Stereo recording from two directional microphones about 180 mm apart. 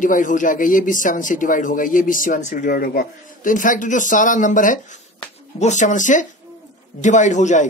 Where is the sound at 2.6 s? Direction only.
60° left (ahead or behind); by 7.7 s 40° left (ahead or behind).